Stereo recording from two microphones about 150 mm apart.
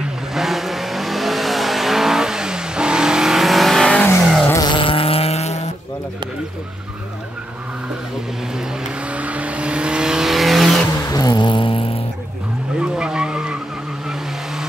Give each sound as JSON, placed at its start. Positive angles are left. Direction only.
{"t": 0.3, "sound": "vehicle", "side_deg": 0}
{"t": 4.5, "sound": "vehicle", "side_deg": 25}
{"t": 9.1, "sound": "vehicle", "side_deg": -10}
{"t": 11.1, "sound": "vehicle", "side_deg": 25}
{"t": 12.7, "sound": "vehicle", "side_deg": -5}